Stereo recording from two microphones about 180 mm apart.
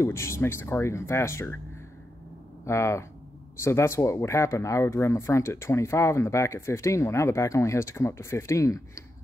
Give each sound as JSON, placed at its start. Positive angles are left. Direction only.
{"t": 0.0, "sound": "speech", "side_deg": 15}
{"t": 2.6, "sound": "speech", "side_deg": 15}